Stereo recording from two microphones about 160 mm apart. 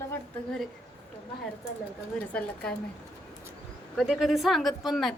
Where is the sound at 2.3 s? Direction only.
5° left (ahead or behind).